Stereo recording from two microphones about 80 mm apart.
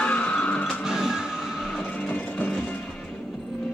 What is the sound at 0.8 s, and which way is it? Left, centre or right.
Music, centre.